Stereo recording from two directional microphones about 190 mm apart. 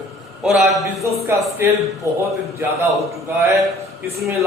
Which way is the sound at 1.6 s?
15° right (ahead or behind).